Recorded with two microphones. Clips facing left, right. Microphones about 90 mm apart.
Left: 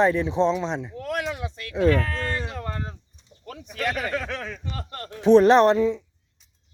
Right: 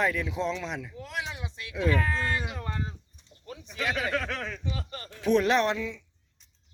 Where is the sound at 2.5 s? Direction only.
40° left (ahead or behind).